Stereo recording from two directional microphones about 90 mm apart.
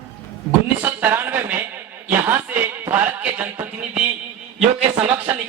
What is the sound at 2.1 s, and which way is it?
Speech, 25° right (ahead or behind).